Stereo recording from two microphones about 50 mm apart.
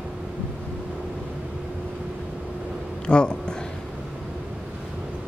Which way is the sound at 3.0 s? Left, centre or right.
Centre.